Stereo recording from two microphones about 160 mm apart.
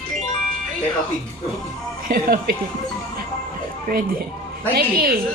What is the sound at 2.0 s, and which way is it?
Speech, 65° right (ahead or behind).